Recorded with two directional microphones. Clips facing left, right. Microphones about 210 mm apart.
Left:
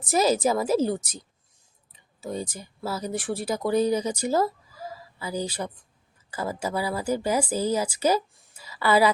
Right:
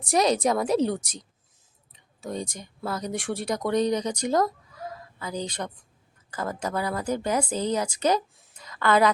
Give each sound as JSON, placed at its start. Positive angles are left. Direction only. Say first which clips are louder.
{"t": 0.0, "sound": "a woman's voice", "louder": "even", "side_deg": 5}